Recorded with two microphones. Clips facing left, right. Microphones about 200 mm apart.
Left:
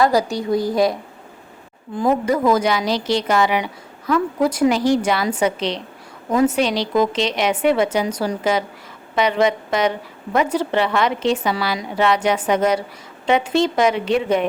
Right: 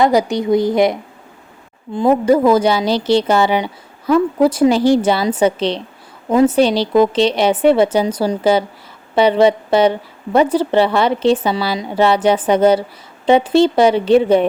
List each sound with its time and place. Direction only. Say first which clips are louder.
0.0 s speech: right 4 dB; 20° right (ahead or behind)
2.0 s a woman's voice: right 6 dB; 30° right (ahead or behind)